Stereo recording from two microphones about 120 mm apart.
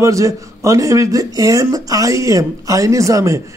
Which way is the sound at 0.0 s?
25° right (ahead or behind).